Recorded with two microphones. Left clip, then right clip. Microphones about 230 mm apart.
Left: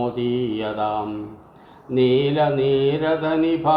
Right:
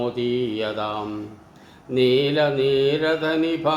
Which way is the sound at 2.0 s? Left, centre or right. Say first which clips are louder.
Even; centre.